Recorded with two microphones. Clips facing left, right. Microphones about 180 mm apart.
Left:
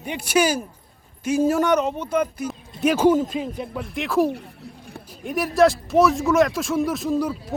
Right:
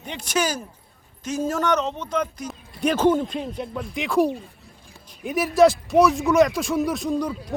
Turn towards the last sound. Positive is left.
turn(degrees=5)  # may be behind; listen again after turning